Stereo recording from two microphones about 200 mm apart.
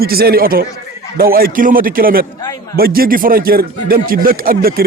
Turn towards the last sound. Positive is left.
turn(degrees=-50)  # may be behind; listen again after turning